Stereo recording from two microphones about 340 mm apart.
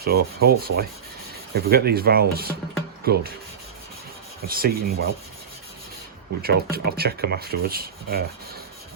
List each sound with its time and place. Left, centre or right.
0.1 s speech: right
0.4 s speech: right
4.4 s speech: right
6.4 s speech: right